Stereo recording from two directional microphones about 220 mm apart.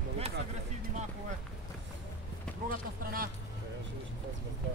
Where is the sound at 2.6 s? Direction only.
40° right (ahead or behind).